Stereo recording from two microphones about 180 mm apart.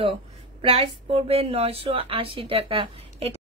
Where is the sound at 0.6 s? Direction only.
35° right (ahead or behind).